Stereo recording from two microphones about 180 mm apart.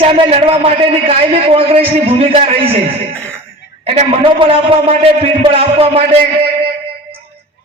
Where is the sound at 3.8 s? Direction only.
30° right (ahead or behind).